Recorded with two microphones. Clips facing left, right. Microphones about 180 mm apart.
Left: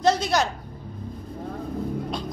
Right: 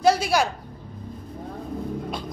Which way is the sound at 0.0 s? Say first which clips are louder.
Right 1 dB; 10° right (ahead or behind).